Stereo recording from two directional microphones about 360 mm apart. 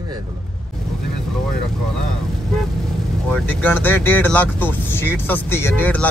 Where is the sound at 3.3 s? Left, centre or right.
Centre.